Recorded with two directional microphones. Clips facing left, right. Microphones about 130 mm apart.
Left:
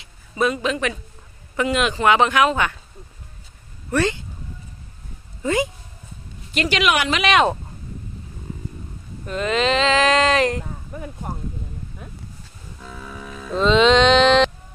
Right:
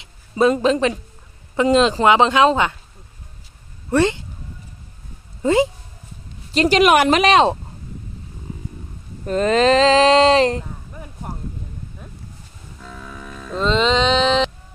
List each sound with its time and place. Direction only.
0.0 s a sound: 30° right (ahead or behind)
0.5 s speech: 35° right (ahead or behind)
3.8 s speech: 25° right (ahead or behind)
5.4 s speech: 30° right (ahead or behind)
9.2 s speech: 40° right (ahead or behind)
12.8 s music: 5° left (ahead or behind)